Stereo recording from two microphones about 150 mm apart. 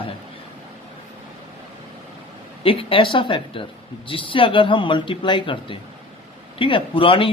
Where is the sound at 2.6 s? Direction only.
35° left (ahead or behind).